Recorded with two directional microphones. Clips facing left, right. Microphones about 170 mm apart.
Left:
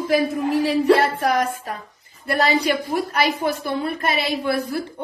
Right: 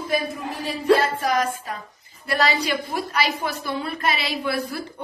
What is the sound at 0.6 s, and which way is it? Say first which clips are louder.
A woman's voice: left 1 dB; 70° left (ahead or behind).